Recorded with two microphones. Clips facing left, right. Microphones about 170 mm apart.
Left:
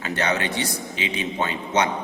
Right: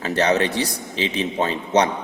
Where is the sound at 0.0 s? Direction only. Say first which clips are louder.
Right 5 dB; 35° right (ahead or behind).